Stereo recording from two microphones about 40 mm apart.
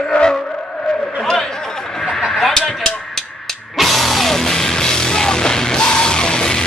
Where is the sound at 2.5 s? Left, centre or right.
Centre.